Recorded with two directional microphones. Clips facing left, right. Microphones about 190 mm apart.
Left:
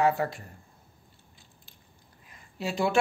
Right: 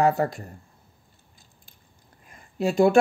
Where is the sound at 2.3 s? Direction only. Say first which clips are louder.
Right 8 dB; 50° right (ahead or behind).